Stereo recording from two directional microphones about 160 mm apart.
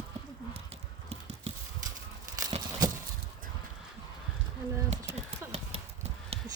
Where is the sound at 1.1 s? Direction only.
40° right (ahead or behind).